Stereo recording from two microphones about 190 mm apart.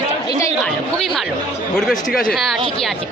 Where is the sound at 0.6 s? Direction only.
Centre (ahead or behind).